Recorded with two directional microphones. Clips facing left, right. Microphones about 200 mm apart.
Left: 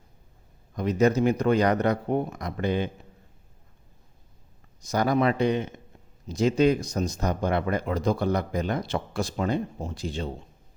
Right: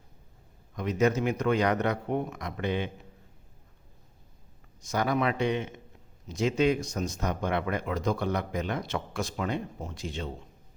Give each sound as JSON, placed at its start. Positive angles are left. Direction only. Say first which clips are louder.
{"t": 0.8, "sound": "speech", "louder": "left 4 dB", "side_deg": 35}
{"t": 4.8, "sound": "speech", "louder": "left 4 dB", "side_deg": 35}